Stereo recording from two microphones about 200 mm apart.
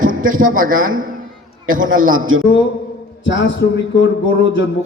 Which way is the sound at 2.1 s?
90° right.